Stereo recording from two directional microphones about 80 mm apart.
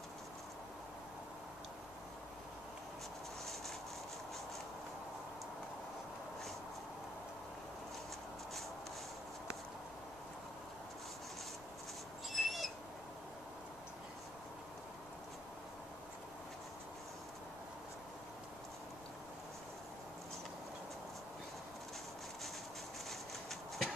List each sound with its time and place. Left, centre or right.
12.3 s owl: centre
23.0 s horse: centre